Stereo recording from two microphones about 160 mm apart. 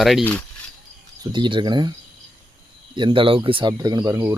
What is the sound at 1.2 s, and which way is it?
Speech, 30° right (ahead or behind).